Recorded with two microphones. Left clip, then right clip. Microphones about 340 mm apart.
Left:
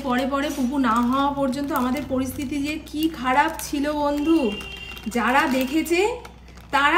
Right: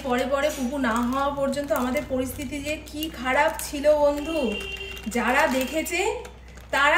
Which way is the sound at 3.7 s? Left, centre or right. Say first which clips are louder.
Left 1 dB; left.